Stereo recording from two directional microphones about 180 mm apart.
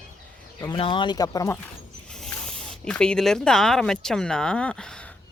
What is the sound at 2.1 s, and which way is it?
Speech, 5° left (ahead or behind).